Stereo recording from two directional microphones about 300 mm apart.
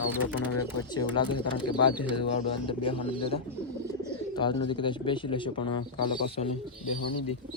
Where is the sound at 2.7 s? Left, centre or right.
Centre.